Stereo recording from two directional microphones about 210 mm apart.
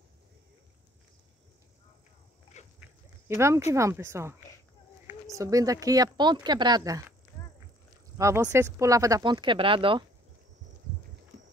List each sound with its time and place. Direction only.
2.6 s dog: 35° left (ahead or behind)
3.3 s speech: 15° right (ahead or behind)
8.2 s speech: 10° right (ahead or behind)